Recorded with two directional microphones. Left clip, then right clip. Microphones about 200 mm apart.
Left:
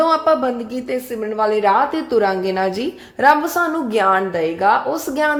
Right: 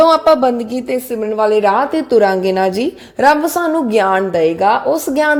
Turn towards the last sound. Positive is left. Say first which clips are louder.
# right 5 dB
turn(degrees=-35)  # may be behind; listen again after turning